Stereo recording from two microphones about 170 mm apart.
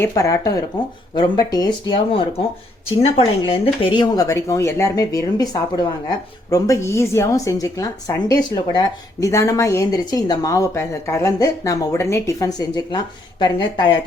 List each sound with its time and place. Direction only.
0.0 s speech: 20° left (ahead or behind)
3.0 s speech: 35° left (ahead or behind)